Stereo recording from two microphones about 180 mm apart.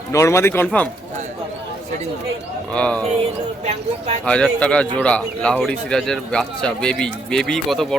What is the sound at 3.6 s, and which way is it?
Speech, 35° right (ahead or behind).